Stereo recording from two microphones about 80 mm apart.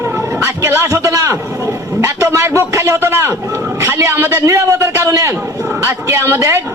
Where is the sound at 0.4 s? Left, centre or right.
Right.